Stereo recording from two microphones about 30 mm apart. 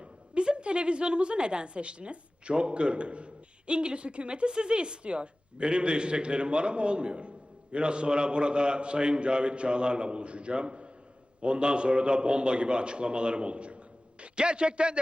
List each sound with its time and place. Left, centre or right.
0.0 s a woman's voice: right